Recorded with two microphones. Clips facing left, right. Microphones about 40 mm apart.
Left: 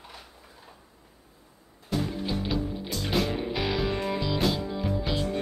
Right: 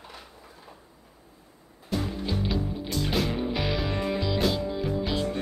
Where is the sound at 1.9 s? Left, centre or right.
Centre.